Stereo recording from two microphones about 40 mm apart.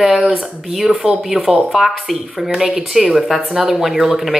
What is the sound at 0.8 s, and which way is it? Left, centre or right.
Speech, centre.